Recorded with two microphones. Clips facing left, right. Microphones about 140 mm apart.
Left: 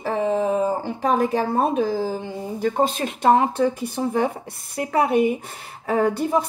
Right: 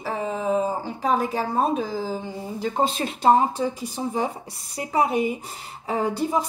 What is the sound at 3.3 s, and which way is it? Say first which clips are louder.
A woman's voice: left 3 dB; 70° left (ahead or behind).